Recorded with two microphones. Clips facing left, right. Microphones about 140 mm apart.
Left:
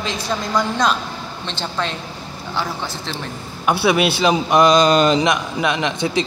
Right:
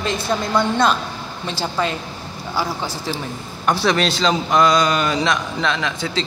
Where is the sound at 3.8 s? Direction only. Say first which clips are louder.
Left 3 dB; 10° left (ahead or behind).